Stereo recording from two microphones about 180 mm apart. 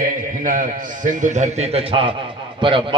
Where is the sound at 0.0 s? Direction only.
45° right (ahead or behind).